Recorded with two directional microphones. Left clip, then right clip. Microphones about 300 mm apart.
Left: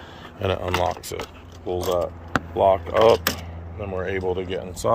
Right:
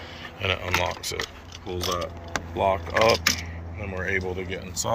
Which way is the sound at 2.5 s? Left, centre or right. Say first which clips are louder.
Left 5 dB; centre.